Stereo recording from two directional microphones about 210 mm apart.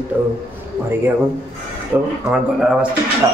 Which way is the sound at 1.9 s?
5° right (ahead or behind).